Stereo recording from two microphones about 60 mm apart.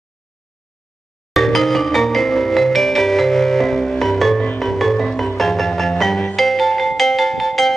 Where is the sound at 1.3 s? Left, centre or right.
Centre.